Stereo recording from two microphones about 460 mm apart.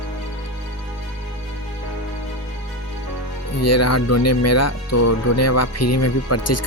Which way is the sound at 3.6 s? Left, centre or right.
Left.